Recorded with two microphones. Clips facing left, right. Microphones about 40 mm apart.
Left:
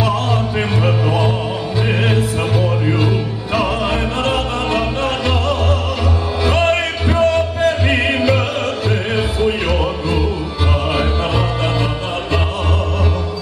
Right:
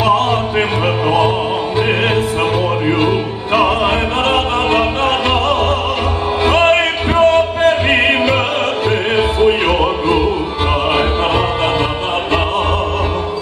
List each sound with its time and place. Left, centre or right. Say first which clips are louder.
0.0 s music: right 5 dB; right
2.9 s music: right 4 dB; right